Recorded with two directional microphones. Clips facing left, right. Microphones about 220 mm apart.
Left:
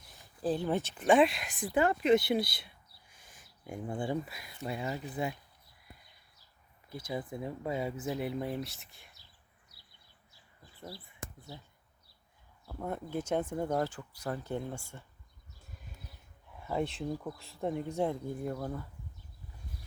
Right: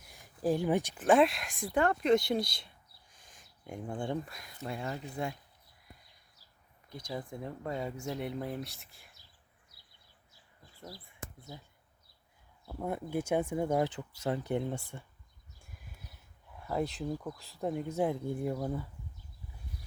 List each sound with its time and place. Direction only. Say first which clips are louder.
0.0 s speech: right 2 dB; 15° right (ahead or behind)
1.0 s speech: left 1 dB; centre (ahead or behind)
6.9 s speech: left 2 dB; 5° left (ahead or behind)
12.6 s speech: right 2 dB; 10° right (ahead or behind)
16.6 s a sound: even; centre (ahead or behind)
17.0 s speech: even; centre (ahead or behind)